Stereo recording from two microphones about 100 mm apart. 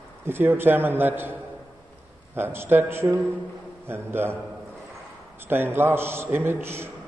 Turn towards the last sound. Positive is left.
turn(degrees=-25)  # may be behind; listen again after turning